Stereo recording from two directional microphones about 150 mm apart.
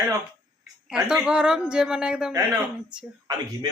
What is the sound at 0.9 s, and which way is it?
A woman's voice, 5° right (ahead or behind).